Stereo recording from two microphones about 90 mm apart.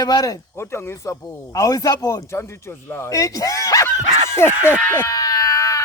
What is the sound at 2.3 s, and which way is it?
Speech, 25° left (ahead or behind).